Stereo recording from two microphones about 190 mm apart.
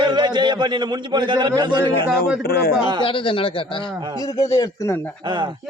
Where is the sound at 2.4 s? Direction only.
55° left (ahead or behind).